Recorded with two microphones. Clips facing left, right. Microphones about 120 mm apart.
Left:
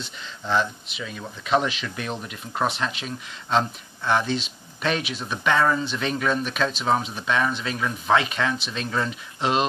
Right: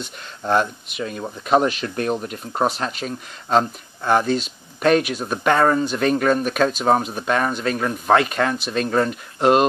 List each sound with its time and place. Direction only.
0.0 s speech: 50° right (ahead or behind)